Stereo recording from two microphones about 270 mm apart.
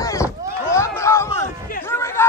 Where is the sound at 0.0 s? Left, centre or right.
Centre.